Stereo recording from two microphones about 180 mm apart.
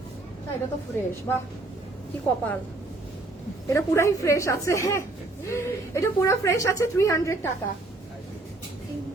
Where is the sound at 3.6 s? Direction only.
15° left (ahead or behind).